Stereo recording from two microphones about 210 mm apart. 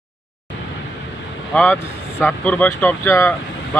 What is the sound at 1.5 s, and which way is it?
Speech, 5° left (ahead or behind).